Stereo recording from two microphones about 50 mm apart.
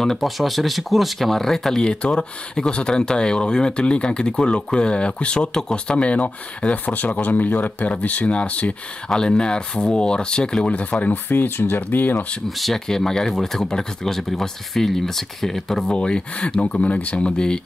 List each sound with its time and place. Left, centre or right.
0.0 s speech: centre
1.8 s speech: centre
9.1 s speech: centre
10.7 s speech: left
12.4 s speech: centre
12.8 s speech: centre
15.9 s speech: centre